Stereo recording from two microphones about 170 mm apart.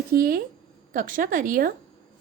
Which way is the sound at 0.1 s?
60° right (ahead or behind).